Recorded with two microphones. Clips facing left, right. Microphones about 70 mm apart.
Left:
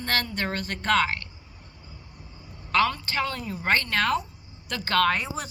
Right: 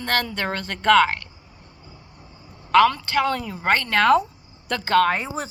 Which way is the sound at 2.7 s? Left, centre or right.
Right.